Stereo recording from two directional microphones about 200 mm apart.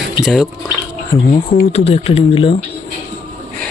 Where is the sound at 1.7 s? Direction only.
30° left (ahead or behind).